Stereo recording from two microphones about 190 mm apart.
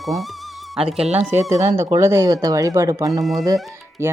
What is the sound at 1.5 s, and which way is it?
Speech, 15° right (ahead or behind).